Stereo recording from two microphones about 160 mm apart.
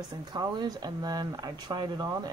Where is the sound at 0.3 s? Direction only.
25° right (ahead or behind).